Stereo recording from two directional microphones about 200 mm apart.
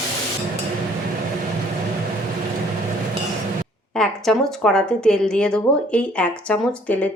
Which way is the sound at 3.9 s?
Centre (ahead or behind).